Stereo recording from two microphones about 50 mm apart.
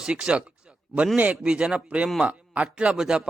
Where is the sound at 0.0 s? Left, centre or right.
Centre.